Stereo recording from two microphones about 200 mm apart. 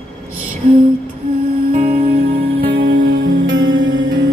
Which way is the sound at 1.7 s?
45° right (ahead or behind).